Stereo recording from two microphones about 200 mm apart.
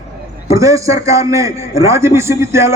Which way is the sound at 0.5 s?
15° right (ahead or behind).